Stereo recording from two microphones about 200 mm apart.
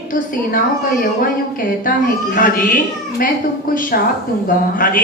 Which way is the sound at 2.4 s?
45° left (ahead or behind).